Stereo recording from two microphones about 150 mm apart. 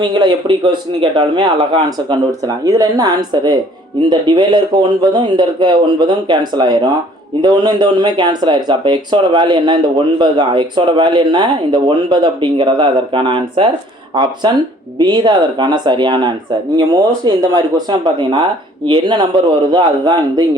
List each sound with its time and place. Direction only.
0.0 s speech: 30° right (ahead or behind)